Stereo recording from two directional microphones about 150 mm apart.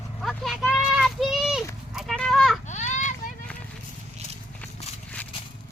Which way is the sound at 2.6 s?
50° left (ahead or behind).